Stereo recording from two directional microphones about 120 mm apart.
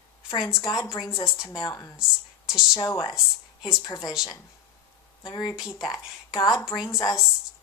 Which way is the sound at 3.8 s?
35° left (ahead or behind).